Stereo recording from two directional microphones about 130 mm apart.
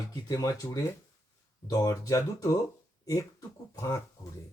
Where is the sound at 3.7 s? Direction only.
25° left (ahead or behind).